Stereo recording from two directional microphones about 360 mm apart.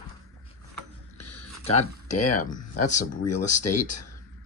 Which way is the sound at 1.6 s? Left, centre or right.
Centre.